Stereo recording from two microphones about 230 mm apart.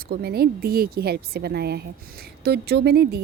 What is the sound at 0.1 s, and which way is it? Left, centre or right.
A woman's voice, right.